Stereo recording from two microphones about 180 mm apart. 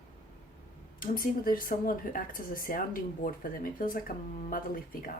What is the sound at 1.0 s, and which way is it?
Speech, 50° left (ahead or behind).